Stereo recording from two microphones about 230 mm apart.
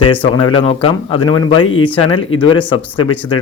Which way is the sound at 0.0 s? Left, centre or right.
Left.